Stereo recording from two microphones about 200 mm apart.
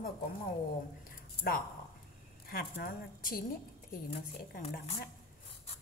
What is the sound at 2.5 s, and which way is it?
Speech, 50° left (ahead or behind).